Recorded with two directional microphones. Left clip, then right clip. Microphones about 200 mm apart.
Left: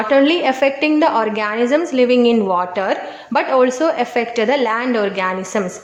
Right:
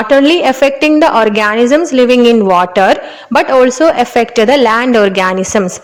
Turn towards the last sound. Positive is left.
turn(degrees=-40)  # may be behind; listen again after turning